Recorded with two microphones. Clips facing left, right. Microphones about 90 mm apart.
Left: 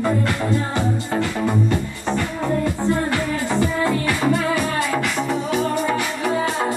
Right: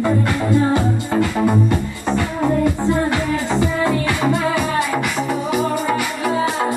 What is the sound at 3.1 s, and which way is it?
Music, 20° right (ahead or behind).